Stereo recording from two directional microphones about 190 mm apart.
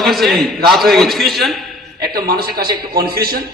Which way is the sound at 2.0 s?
55° right (ahead or behind).